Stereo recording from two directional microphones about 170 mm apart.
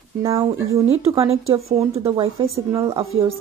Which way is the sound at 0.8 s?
35° right (ahead or behind).